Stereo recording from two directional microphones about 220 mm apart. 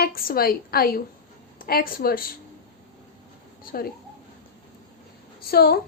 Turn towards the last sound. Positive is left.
turn(degrees=45)  # may be behind; listen again after turning